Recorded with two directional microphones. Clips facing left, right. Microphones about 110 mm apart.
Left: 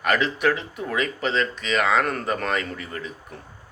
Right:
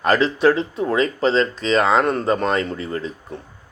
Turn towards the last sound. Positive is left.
turn(degrees=-30)  # may be behind; listen again after turning